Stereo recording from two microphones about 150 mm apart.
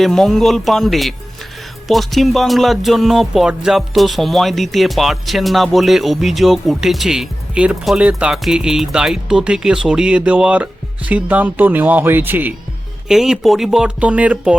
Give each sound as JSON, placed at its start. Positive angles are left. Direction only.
{"t": 0.0, "sound": "music", "side_deg": 0}